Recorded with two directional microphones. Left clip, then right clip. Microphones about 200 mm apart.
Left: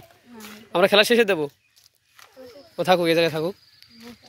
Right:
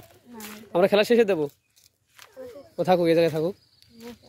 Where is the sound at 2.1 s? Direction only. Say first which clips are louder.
Right 3 dB; 20° right (ahead or behind).